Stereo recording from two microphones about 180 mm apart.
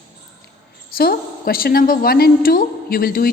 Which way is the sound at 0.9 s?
55° left (ahead or behind).